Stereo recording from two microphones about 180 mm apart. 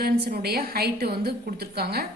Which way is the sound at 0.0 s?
60° right (ahead or behind).